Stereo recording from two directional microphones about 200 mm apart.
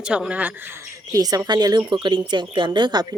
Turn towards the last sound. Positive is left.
turn(degrees=-20)  # may be behind; listen again after turning